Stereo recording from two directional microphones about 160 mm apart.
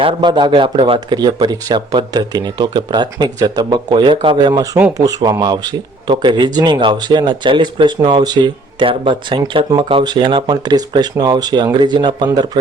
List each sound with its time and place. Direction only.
0.0 s speech: 30° right (ahead or behind)